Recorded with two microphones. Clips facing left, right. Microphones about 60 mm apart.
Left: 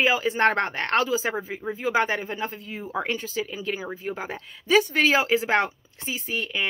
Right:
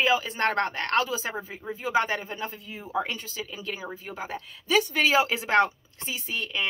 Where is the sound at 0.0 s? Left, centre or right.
Centre.